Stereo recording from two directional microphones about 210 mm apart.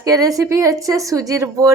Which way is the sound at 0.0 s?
15° right (ahead or behind).